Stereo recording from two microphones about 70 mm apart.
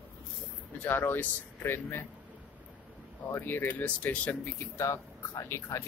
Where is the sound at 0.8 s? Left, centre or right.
Left.